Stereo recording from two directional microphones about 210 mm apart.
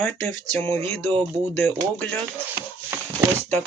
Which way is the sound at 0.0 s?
10° left (ahead or behind).